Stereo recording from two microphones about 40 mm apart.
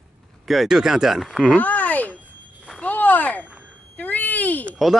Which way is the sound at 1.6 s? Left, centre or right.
Left.